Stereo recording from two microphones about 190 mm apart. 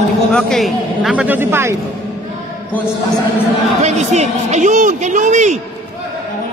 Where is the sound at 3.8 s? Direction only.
35° right (ahead or behind).